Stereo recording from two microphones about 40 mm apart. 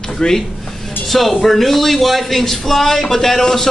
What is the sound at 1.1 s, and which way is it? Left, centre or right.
A man's voice, centre.